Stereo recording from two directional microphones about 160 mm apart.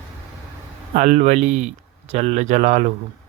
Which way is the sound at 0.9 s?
50° right (ahead or behind).